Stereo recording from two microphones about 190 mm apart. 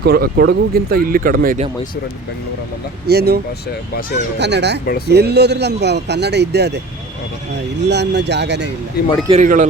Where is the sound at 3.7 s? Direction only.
55° left (ahead or behind).